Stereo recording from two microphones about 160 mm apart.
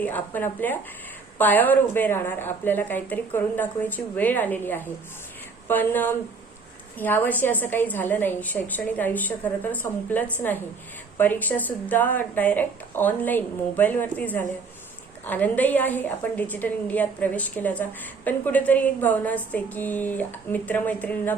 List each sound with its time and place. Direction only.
0.0 s a woman's voice: 10° left (ahead or behind)